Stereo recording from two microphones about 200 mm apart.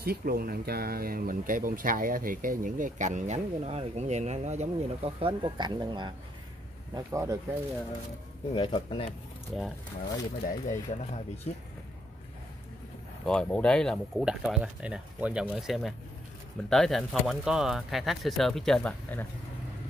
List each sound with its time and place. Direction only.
0.0 s speech: 50° right (ahead or behind); by 7.3 s 15° right (ahead or behind)
8.5 s speech: 25° left (ahead or behind)
9.5 s speech: centre (ahead or behind)
10.5 s speech: 35° left (ahead or behind)
13.2 s speech: 5° left (ahead or behind)